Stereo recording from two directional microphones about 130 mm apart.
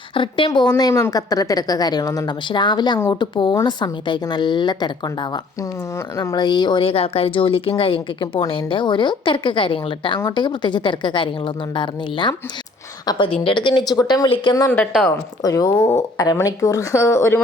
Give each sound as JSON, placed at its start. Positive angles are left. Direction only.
{"t": 0.1, "sound": "speech", "side_deg": 40}
{"t": 14.3, "sound": "speech", "side_deg": 45}
{"t": 15.4, "sound": "speech", "side_deg": 30}